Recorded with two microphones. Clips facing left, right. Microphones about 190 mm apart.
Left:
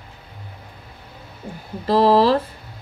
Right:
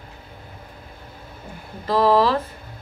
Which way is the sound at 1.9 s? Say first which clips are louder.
Left 3 dB; 35° left (ahead or behind).